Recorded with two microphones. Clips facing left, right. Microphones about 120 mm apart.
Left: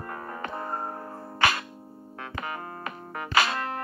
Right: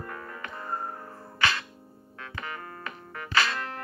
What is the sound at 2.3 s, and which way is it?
Keyboard, 35° left (ahead or behind).